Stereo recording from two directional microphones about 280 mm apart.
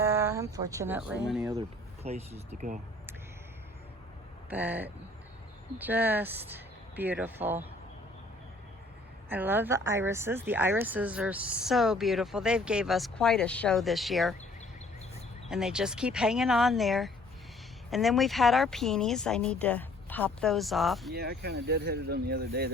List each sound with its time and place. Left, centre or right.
0.0 s a sound: centre
1.3 s speech: centre
2.0 s speech: right
4.4 s speech: centre
9.3 s speech: centre
15.4 s speech: centre
21.1 s speech: right